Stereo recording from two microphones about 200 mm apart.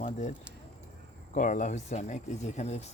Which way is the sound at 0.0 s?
35° left (ahead or behind).